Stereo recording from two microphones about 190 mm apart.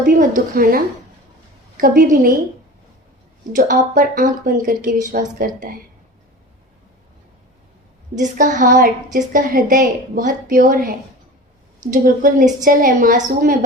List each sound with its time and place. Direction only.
0.1 s a woman's voice: 45° right (ahead or behind)
1.8 s a woman's voice: 50° right (ahead or behind)
3.5 s a woman's voice: 45° right (ahead or behind)
8.1 s a woman's voice: 40° right (ahead or behind)